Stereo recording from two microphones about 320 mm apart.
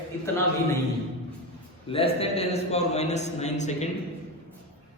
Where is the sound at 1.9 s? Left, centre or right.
Centre.